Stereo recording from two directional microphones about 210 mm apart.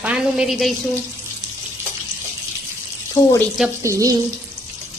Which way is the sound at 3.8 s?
15° right (ahead or behind).